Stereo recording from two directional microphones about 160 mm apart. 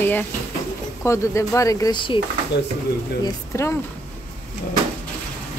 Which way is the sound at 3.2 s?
15° left (ahead or behind).